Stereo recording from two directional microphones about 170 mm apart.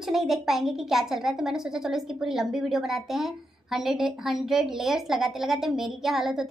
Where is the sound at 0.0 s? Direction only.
Centre (ahead or behind).